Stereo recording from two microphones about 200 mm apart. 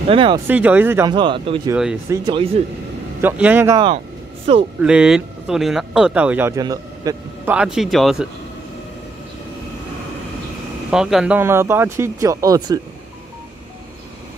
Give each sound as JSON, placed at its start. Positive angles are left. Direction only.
{"t": 0.1, "sound": "speech", "side_deg": -25}
{"t": 0.5, "sound": "speech", "side_deg": -10}
{"t": 1.1, "sound": "speech", "side_deg": -25}
{"t": 3.2, "sound": "speech", "side_deg": -10}
{"t": 4.5, "sound": "speech", "side_deg": -30}
{"t": 4.8, "sound": "speech", "side_deg": -5}
{"t": 7.5, "sound": "speech", "side_deg": -5}
{"t": 10.9, "sound": "speech", "side_deg": 0}